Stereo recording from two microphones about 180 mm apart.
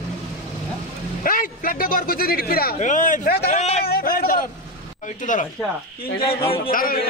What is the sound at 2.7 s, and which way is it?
Speech, 45° left (ahead or behind).